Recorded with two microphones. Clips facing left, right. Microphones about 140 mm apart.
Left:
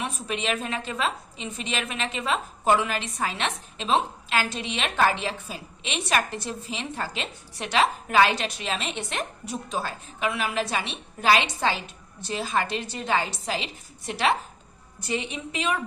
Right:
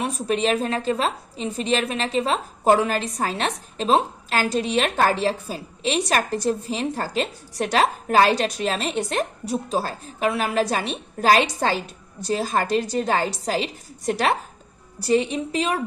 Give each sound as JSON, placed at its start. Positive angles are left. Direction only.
{"t": 0.0, "sound": "a woman's voice", "side_deg": -35}